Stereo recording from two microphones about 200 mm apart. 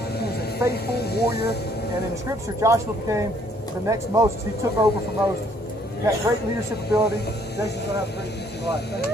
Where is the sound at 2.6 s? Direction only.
15° right (ahead or behind).